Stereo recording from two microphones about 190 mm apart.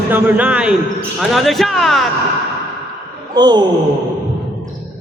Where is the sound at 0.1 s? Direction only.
10° right (ahead or behind).